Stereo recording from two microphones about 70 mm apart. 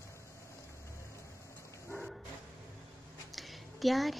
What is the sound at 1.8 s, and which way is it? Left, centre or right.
Bow-wow, centre.